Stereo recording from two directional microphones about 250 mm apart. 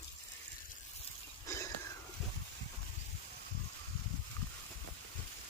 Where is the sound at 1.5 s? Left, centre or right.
Centre.